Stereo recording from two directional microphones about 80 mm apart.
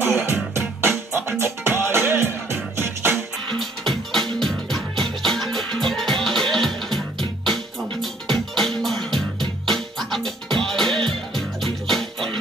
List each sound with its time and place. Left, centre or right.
0.0 s music: right
3.5 s music: centre